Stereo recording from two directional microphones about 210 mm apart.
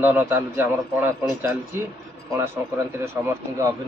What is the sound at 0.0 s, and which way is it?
Speech, 10° right (ahead or behind).